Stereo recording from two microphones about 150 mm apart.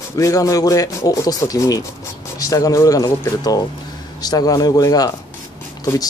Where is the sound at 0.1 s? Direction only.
20° left (ahead or behind).